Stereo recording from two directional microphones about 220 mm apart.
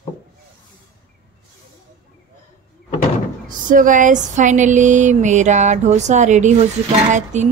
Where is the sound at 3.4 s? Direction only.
35° right (ahead or behind).